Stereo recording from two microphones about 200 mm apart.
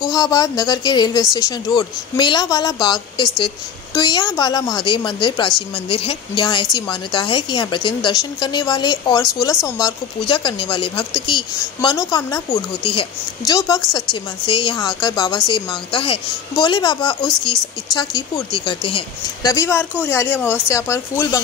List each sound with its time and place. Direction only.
0.1 s speech: 20° left (ahead or behind)
19.5 s speech: 15° left (ahead or behind)